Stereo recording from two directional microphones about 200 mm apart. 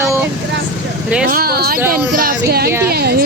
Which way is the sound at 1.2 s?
50° right (ahead or behind).